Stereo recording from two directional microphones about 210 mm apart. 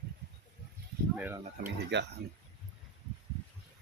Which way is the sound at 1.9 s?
55° right (ahead or behind).